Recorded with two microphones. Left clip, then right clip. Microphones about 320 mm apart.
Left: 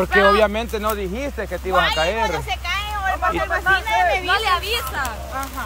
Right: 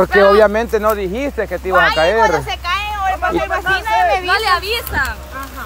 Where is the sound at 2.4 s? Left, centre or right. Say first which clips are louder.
Right 5 dB; centre.